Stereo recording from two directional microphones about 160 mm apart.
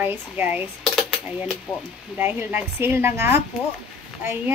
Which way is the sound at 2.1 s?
15° right (ahead or behind).